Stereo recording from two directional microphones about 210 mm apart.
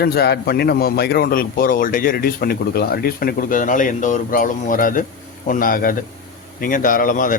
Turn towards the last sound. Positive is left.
turn(degrees=40)  # may be behind; listen again after turning